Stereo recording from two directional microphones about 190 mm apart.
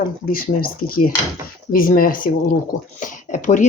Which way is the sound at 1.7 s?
50° left (ahead or behind).